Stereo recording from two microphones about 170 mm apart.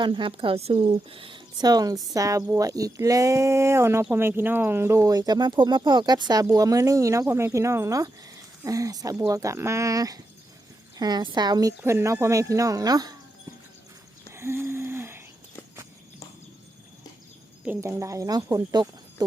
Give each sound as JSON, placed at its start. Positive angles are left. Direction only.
{"t": 0.0, "sound": "speech", "side_deg": -30}
{"t": 14.3, "sound": "a sound", "side_deg": -15}
{"t": 17.7, "sound": "speech", "side_deg": -15}